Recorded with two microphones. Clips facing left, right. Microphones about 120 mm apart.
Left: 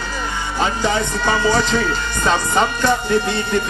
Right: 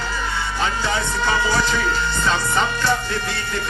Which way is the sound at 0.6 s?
15° left (ahead or behind).